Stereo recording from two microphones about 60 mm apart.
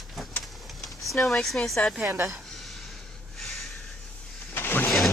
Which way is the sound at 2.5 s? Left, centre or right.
Centre.